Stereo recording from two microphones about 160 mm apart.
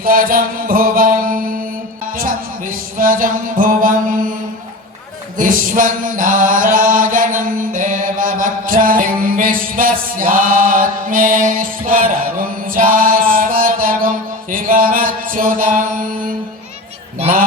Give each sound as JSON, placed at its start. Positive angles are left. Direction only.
{"t": 0.0, "sound": "mantra", "side_deg": -60}
{"t": 2.1, "sound": "music", "side_deg": -60}
{"t": 5.4, "sound": "chant", "side_deg": -60}
{"t": 14.5, "sound": "mantra", "side_deg": -60}